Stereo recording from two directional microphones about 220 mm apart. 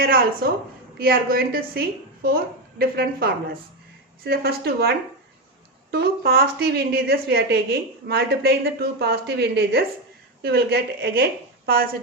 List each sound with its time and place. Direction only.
0.4 s a woman's voice: 45° right (ahead or behind)